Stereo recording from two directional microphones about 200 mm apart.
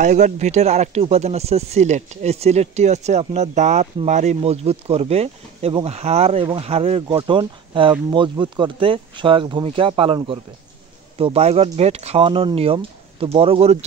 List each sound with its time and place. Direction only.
0.0 s speech: 35° right (ahead or behind)